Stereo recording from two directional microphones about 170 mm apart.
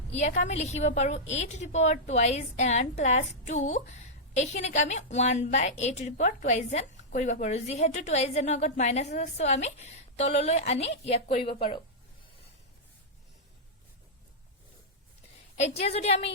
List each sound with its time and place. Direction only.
0.1 s a woman's voice: 45° left (ahead or behind)
15.5 s a woman's voice: 40° left (ahead or behind)